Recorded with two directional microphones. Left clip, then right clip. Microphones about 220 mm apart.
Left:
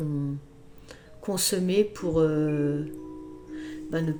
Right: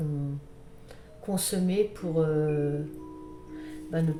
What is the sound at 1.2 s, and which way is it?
Speech, 45° left (ahead or behind).